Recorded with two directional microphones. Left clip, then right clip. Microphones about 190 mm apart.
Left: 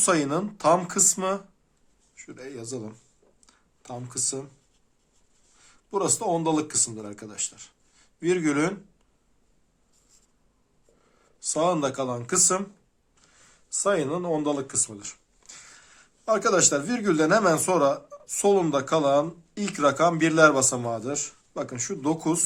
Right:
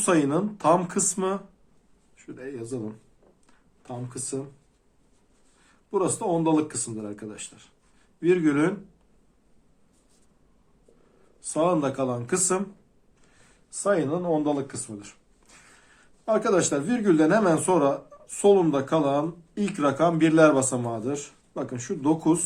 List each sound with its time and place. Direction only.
0.0 s speech: 35° left (ahead or behind)
3.4 s a sound: 40° left (ahead or behind)
5.9 s speech: 35° left (ahead or behind)
11.4 s speech: 35° left (ahead or behind)
13.7 s speech: 35° left (ahead or behind)